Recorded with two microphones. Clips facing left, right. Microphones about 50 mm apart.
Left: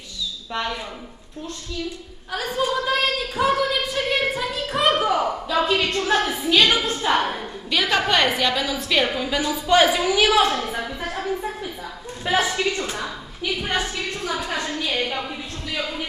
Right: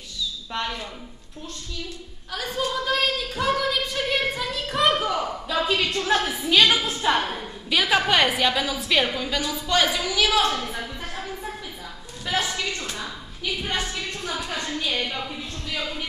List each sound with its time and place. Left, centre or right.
0.5 s a woman's voice: centre
2.3 s a woman's voice: centre
5.5 s a woman's voice: centre
7.2 s a woman's voice: left
7.7 s a woman's voice: centre
9.1 s a woman's voice: centre; by 11.1 s left
12.3 s a woman's voice: left
14.5 s a woman's voice: left